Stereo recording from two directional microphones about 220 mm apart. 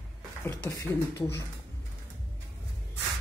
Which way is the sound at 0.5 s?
10° left (ahead or behind).